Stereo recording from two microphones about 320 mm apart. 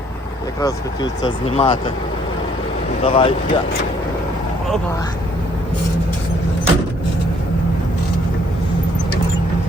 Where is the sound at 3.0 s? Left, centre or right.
Centre.